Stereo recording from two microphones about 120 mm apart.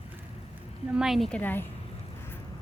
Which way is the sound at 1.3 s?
15° left (ahead or behind).